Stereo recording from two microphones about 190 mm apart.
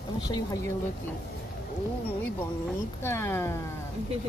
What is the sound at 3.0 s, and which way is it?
Speech, 10° left (ahead or behind).